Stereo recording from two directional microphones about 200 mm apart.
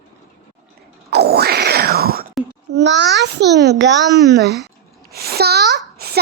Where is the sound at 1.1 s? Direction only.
55° right (ahead or behind).